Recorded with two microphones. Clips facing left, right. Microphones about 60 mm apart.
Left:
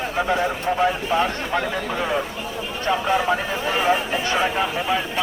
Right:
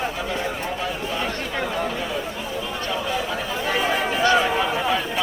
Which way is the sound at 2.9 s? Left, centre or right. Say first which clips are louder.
Left 8 dB; left.